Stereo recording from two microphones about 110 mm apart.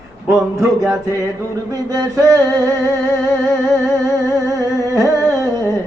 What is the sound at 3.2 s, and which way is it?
Speech, 30° right (ahead or behind).